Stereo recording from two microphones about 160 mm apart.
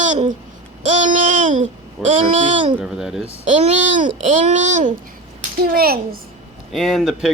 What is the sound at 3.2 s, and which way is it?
A child's voice, 45° right (ahead or behind).